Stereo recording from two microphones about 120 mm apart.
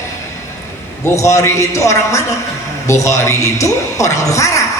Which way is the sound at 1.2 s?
25° left (ahead or behind).